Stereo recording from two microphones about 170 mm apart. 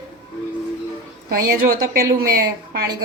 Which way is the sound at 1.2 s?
60° right (ahead or behind).